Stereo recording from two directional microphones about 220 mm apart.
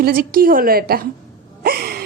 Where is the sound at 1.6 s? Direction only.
45° right (ahead or behind).